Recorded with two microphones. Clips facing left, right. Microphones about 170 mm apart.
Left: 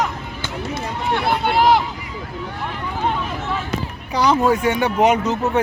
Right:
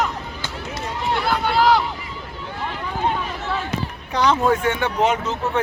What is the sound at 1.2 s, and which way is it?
Speech, 25° left (ahead or behind).